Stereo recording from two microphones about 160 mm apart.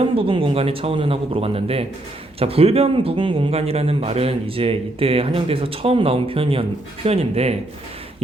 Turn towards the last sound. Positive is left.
turn(degrees=-40)  # may be behind; listen again after turning